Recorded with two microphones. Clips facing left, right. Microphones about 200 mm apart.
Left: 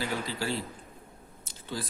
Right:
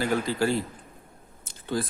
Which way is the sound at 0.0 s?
50° right (ahead or behind).